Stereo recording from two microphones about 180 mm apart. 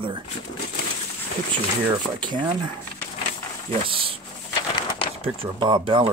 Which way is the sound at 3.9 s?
30° right (ahead or behind).